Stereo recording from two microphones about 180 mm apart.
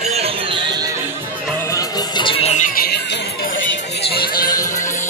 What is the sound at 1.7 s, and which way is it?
Music, 30° left (ahead or behind).